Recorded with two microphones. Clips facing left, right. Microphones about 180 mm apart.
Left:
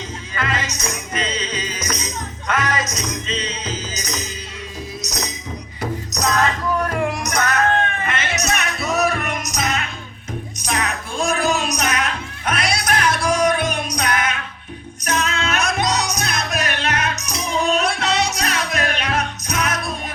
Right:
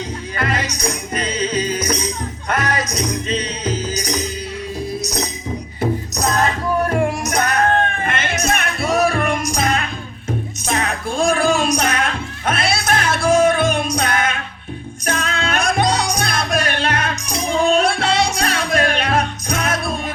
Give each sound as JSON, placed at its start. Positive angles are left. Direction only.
{"t": 1.4, "sound": "music", "side_deg": -55}
{"t": 2.9, "sound": "music", "side_deg": -35}
{"t": 3.2, "sound": "music", "side_deg": -60}
{"t": 5.0, "sound": "music", "side_deg": -30}
{"t": 7.8, "sound": "music", "side_deg": -50}
{"t": 8.8, "sound": "music", "side_deg": -30}